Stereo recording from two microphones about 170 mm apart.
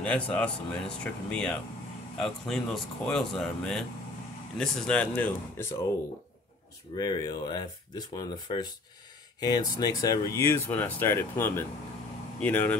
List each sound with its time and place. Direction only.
0.0 s speech: 5° left (ahead or behind)
7.0 s speech: 25° left (ahead or behind)